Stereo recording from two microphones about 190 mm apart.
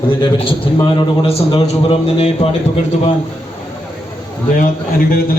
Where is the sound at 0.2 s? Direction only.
25° left (ahead or behind).